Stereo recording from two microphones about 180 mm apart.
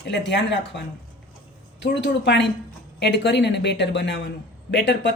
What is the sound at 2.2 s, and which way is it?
Speech, 70° left (ahead or behind).